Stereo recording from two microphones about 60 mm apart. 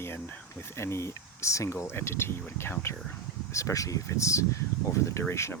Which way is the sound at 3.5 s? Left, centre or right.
Left.